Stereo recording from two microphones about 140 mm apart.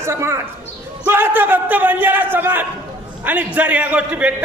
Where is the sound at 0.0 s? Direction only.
20° right (ahead or behind).